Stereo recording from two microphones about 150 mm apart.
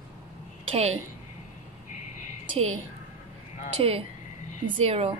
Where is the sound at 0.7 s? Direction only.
45° right (ahead or behind).